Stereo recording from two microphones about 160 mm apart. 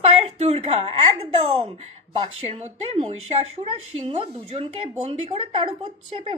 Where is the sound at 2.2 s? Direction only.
40° right (ahead or behind).